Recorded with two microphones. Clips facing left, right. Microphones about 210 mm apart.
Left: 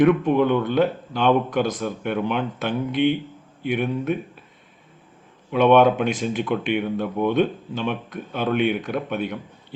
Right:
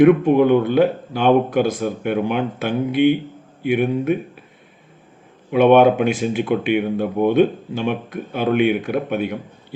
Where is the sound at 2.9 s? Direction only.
10° right (ahead or behind).